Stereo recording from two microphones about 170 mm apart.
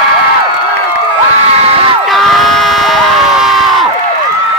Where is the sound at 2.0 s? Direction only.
Centre (ahead or behind).